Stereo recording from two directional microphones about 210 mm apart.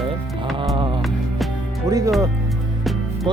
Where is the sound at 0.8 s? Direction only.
25° right (ahead or behind).